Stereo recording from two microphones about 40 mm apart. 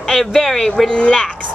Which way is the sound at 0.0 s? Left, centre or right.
Centre.